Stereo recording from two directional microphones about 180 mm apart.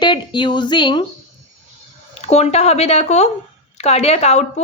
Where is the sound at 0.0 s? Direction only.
25° left (ahead or behind).